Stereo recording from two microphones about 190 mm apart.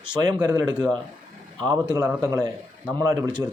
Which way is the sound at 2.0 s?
15° right (ahead or behind).